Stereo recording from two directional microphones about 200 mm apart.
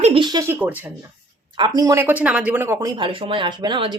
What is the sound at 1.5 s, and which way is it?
Speech, 20° right (ahead or behind).